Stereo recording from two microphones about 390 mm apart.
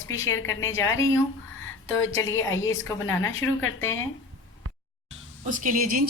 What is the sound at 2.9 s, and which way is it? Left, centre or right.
Speech, centre.